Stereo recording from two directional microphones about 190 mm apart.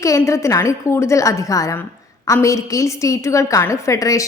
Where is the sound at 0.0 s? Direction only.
15° left (ahead or behind).